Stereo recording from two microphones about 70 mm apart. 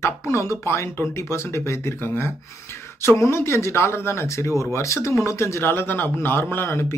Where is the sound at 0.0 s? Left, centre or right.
Left.